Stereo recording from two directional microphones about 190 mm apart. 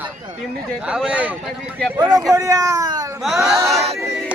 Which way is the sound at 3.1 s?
Centre (ahead or behind).